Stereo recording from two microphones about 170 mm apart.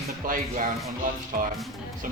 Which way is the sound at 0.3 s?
50° right (ahead or behind).